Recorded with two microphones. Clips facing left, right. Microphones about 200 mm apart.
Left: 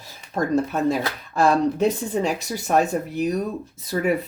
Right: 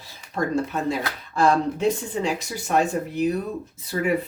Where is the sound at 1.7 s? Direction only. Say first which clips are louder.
Left 2 dB; 40° left (ahead or behind).